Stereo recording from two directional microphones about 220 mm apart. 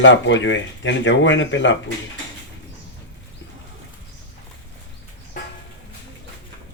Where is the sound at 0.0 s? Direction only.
55° left (ahead or behind).